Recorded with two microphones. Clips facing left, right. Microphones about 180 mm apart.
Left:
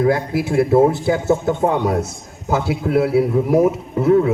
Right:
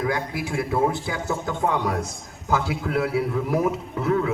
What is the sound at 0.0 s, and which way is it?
A man's voice, 30° left (ahead or behind).